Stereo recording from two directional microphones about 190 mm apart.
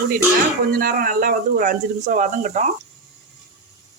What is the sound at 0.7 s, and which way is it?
Speech, 45° right (ahead or behind).